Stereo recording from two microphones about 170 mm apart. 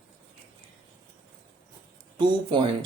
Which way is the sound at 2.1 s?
30° right (ahead or behind).